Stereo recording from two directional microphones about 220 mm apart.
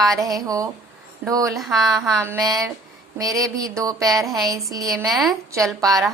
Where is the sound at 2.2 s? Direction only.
15° right (ahead or behind).